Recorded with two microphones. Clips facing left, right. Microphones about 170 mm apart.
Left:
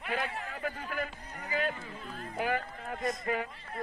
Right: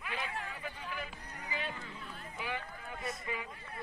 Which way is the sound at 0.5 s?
50° left (ahead or behind).